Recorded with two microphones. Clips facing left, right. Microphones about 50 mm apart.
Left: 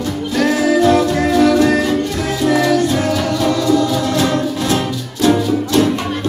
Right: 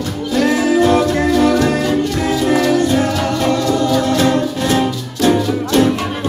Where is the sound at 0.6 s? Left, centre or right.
Right.